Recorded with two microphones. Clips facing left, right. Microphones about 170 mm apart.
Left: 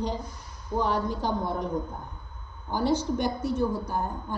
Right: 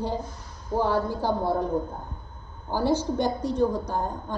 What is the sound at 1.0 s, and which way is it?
Speech, 10° right (ahead or behind).